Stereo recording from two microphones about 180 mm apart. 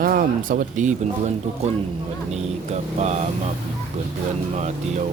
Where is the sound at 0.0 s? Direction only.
50° right (ahead or behind).